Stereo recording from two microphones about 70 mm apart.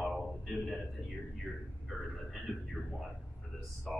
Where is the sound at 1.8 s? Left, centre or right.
Centre.